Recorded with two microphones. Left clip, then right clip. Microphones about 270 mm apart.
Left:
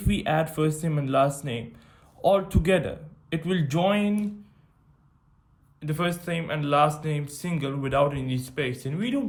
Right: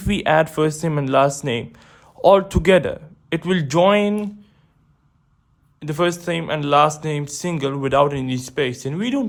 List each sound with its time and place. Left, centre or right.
0.0 s speech: right
5.8 s speech: centre